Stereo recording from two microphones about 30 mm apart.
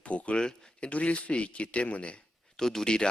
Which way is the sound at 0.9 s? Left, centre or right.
Left.